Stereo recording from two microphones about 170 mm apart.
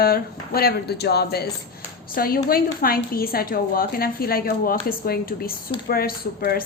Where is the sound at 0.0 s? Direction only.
65° left (ahead or behind).